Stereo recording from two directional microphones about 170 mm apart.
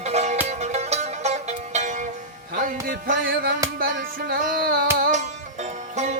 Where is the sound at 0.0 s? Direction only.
40° right (ahead or behind); by 5.2 s 60° right (ahead or behind).